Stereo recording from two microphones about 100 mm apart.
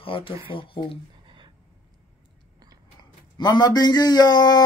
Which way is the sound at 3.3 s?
45° left (ahead or behind).